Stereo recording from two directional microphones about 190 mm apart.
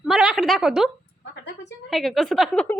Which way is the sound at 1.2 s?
65° left (ahead or behind).